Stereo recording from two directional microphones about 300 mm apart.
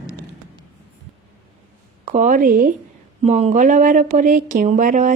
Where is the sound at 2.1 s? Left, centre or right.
Right.